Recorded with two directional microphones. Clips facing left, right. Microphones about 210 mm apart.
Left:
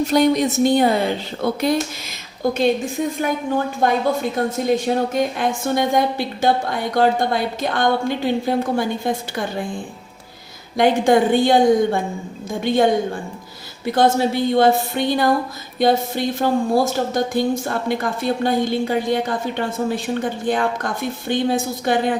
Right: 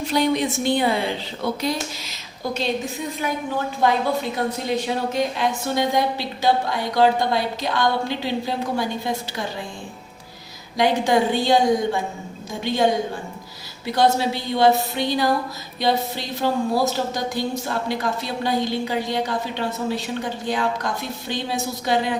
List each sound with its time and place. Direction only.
0.0 s speech: 45° left (ahead or behind)
1.6 s speech: 55° left (ahead or behind)
3.8 s speech: 50° left (ahead or behind)
10.8 s speech: 55° left (ahead or behind)